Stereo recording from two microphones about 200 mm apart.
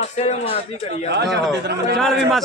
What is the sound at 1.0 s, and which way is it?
Speech, 55° right (ahead or behind).